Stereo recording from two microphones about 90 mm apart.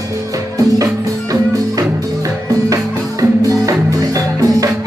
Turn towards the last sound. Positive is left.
turn(degrees=-40)  # may be behind; listen again after turning